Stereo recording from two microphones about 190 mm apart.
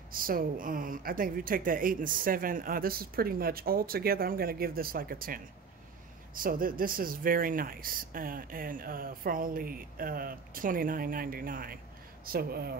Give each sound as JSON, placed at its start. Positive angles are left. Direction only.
{"t": 0.1, "sound": "speech", "side_deg": -50}